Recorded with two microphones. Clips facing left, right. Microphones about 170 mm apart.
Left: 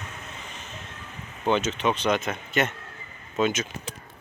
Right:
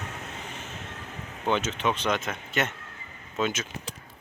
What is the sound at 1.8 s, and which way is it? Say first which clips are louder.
Speech: left 3 dB; 10° left (ahead or behind).